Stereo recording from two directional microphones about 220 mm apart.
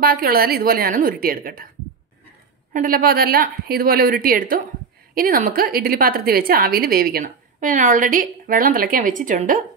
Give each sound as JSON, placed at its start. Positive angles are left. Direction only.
{"t": 0.0, "sound": "a woman's voice", "side_deg": -40}
{"t": 2.7, "sound": "a woman's voice", "side_deg": -40}